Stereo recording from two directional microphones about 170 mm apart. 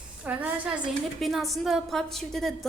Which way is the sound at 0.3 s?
10° right (ahead or behind).